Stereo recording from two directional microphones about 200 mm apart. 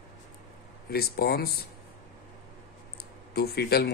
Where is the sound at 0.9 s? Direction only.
50° left (ahead or behind).